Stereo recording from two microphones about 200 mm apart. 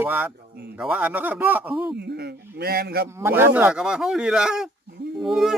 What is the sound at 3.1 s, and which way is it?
Speech, 10° right (ahead or behind).